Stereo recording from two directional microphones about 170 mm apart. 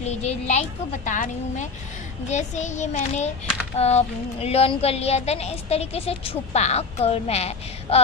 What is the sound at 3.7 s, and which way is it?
A woman's voice, 40° left (ahead or behind).